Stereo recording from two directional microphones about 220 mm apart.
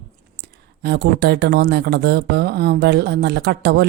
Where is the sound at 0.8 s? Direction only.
50° right (ahead or behind).